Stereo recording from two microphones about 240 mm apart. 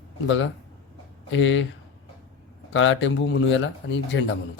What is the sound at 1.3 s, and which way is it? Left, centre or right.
Speech, left.